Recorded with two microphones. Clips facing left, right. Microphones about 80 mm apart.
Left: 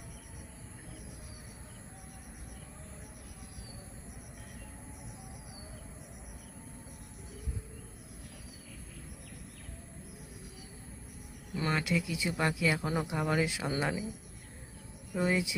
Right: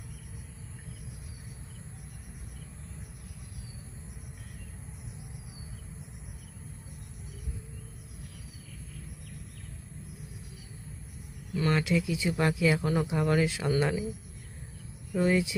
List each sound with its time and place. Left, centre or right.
11.7 s speech: centre
15.1 s speech: centre